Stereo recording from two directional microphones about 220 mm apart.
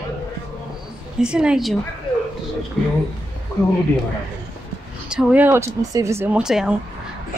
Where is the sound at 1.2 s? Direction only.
5° right (ahead or behind).